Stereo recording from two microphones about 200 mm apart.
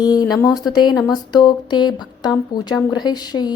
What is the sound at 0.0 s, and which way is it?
A woman's voice, 20° left (ahead or behind).